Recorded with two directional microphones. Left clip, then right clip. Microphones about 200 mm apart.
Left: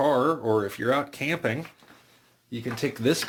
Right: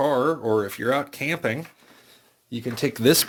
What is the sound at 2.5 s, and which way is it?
Speech, 45° right (ahead or behind).